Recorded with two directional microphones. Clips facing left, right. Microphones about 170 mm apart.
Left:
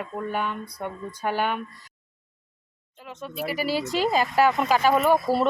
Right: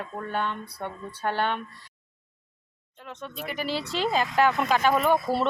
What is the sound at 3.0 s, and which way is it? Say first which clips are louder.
Speech: left 4 dB; 5° left (ahead or behind).